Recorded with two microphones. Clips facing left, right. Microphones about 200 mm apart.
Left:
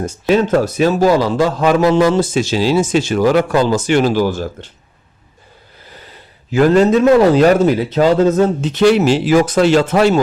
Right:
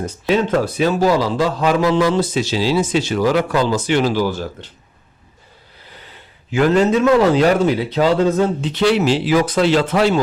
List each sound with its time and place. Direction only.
0.0 s a man's voice: 45° left (ahead or behind)
6.5 s a man's voice: 40° left (ahead or behind)